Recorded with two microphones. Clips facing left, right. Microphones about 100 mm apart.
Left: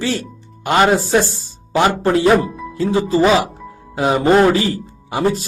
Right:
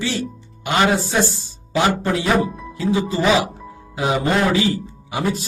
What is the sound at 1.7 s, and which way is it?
Speech, 40° left (ahead or behind).